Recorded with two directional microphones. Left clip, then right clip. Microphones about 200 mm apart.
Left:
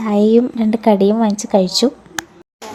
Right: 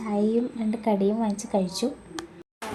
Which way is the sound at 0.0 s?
40° left (ahead or behind).